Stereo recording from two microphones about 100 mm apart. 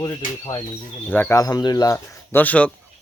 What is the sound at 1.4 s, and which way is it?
Speech, 40° left (ahead or behind).